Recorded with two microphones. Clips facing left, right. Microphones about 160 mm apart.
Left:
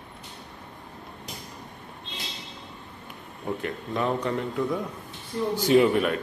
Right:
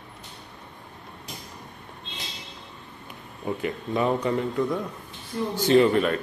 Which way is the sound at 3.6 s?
5° right (ahead or behind).